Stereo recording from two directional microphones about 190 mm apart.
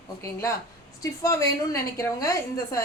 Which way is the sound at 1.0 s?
15° left (ahead or behind).